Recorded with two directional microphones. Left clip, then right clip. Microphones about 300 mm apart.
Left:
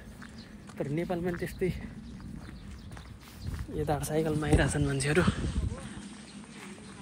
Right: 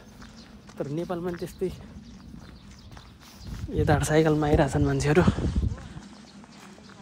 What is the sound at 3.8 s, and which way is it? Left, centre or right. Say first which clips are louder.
Speech: right 8 dB; right.